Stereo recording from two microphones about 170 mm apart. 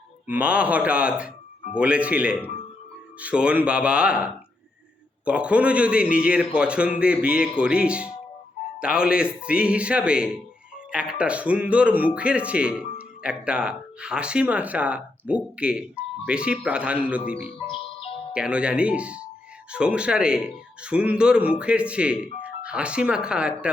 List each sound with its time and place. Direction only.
0.3 s speech: 10° right (ahead or behind)
17.7 s music: 35° left (ahead or behind)
18.3 s speech: 5° right (ahead or behind)